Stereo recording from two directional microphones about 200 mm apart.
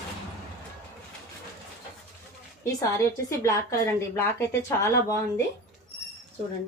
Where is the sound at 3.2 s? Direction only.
15° left (ahead or behind).